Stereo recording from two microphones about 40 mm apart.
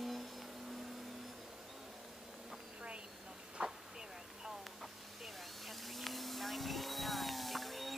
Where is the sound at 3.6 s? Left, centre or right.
Right.